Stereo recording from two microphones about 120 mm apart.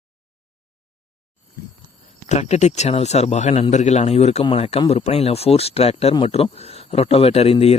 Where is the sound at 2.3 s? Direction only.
70° left (ahead or behind).